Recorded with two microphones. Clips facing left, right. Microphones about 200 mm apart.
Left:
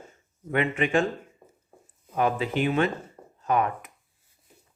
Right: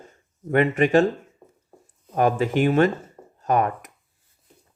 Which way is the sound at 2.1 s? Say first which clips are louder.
Right 5 dB; 45° right (ahead or behind).